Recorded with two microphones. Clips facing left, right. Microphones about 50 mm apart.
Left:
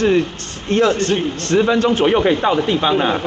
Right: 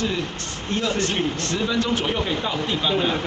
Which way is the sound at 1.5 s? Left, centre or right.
Left.